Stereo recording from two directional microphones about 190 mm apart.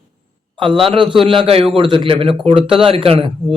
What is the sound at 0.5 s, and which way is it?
A man's voice, 25° right (ahead or behind).